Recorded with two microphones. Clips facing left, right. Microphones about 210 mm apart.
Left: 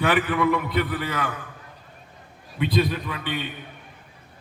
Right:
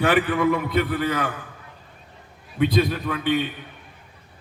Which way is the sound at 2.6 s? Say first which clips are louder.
Right 3 dB; 50° right (ahead or behind).